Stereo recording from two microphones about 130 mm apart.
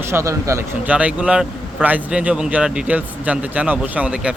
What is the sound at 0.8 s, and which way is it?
A man's voice, 10° right (ahead or behind).